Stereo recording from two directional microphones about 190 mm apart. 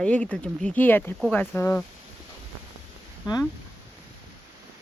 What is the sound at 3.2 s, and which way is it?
Speech, 20° left (ahead or behind).